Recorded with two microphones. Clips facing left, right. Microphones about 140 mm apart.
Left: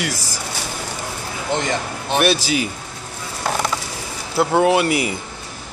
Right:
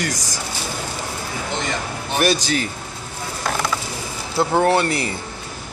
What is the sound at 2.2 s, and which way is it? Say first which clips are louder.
Speech: even; 5° left (ahead or behind).